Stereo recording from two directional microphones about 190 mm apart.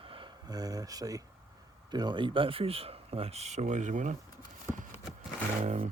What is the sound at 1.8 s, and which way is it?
Speech, 20° right (ahead or behind).